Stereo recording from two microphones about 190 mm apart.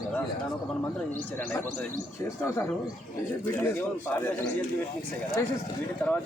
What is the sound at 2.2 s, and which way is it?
Speech, 15° left (ahead or behind).